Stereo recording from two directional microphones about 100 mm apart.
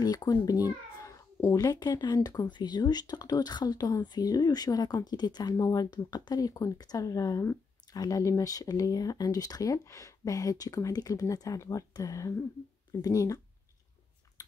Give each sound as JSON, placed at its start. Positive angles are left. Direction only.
{"t": 0.0, "sound": "a child's voice", "side_deg": 40}